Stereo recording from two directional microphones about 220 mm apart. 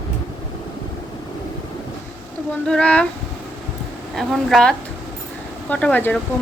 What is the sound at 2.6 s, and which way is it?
Speech, 5° left (ahead or behind).